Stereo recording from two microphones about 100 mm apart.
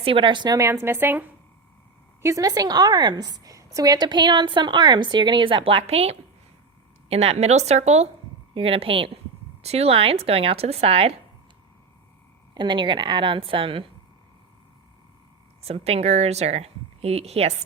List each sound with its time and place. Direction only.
0.0 s a woman's voice: 60° right (ahead or behind)
0.5 s a woman's voice: 30° right (ahead or behind)
2.2 s a woman's voice: 35° right (ahead or behind); by 8.0 s 90° right
8.5 s a woman's voice: 70° right (ahead or behind)
9.6 s a woman's voice: 90° right
12.5 s a woman's voice: 50° right (ahead or behind)
15.6 s speech: 90° right